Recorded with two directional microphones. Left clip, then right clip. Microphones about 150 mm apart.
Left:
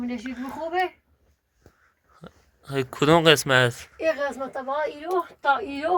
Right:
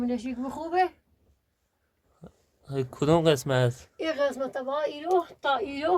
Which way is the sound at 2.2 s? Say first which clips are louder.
Left 6 dB; centre (ahead or behind).